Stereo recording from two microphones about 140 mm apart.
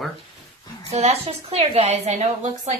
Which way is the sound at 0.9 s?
50° right (ahead or behind).